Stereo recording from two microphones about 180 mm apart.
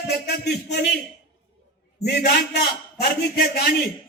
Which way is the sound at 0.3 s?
65° left (ahead or behind).